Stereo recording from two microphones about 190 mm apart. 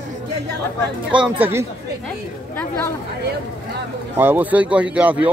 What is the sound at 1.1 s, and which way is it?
Speech, 10° right (ahead or behind).